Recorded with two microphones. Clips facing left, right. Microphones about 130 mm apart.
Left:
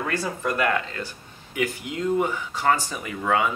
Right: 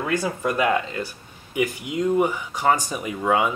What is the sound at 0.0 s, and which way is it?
Speech, 15° right (ahead or behind).